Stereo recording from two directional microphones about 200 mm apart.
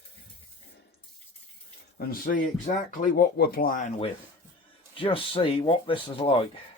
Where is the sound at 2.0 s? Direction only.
45° left (ahead or behind).